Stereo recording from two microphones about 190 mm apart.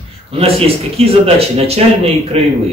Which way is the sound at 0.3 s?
30° right (ahead or behind).